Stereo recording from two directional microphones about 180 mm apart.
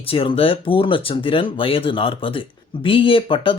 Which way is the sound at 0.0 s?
30° left (ahead or behind).